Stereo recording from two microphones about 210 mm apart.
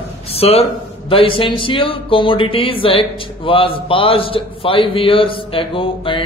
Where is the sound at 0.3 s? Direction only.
30° left (ahead or behind).